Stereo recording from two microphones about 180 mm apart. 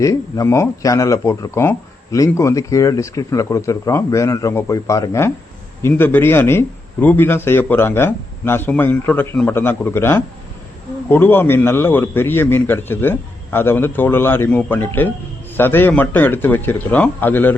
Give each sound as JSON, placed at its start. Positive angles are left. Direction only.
{"t": 0.0, "sound": "speech", "side_deg": 15}